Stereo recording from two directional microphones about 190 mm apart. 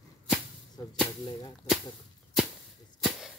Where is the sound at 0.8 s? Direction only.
20° left (ahead or behind).